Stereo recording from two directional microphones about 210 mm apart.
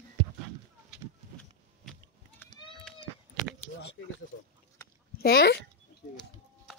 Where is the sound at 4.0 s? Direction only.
60° left (ahead or behind).